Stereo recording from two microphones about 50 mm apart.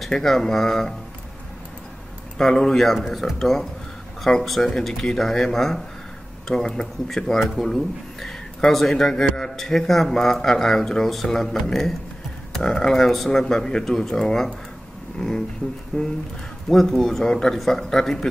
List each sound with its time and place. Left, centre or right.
0.0 s speech: centre
2.3 s speech: centre
3.3 s speech: centre
16.6 s speech: centre